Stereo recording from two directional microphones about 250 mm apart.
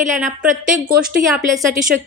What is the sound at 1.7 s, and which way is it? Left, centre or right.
Speech, right.